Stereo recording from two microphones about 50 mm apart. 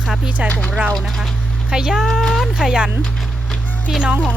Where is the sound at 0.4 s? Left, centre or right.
Left.